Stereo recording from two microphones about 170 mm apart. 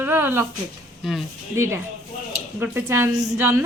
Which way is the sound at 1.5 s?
15° right (ahead or behind).